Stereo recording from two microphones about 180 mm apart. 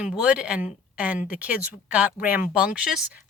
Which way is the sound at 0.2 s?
5° right (ahead or behind).